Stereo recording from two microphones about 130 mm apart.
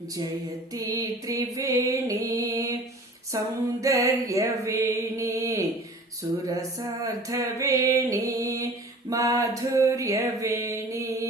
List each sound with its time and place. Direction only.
0.7 s music: 25° right (ahead or behind)